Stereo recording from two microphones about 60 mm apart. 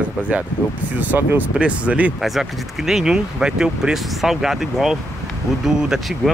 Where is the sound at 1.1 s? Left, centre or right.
Right.